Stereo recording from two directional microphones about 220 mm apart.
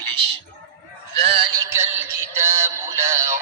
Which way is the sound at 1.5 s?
10° right (ahead or behind).